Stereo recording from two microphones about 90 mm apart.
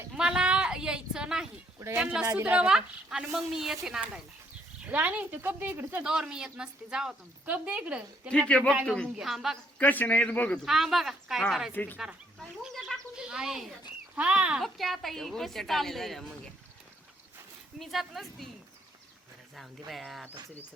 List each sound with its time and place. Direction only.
0.2 s a sound: 10° right (ahead or behind)
2.0 s a woman's voice: 10° right (ahead or behind)
6.1 s a woman's voice: 10° right (ahead or behind)
8.3 s a man's voice: 10° left (ahead or behind)
9.1 s a woman's voice: 5° right (ahead or behind)
9.7 s a man's voice: 20° left (ahead or behind)
10.7 s a woman's voice: 5° right (ahead or behind)
11.7 s a man's voice: 20° left (ahead or behind)
12.4 s chicken: 5° left (ahead or behind)
13.1 s a woman's voice: 10° right (ahead or behind)
14.6 s a woman's voice: centre (ahead or behind)
17.7 s a woman's voice: centre (ahead or behind)
19.5 s a woman's voice: centre (ahead or behind)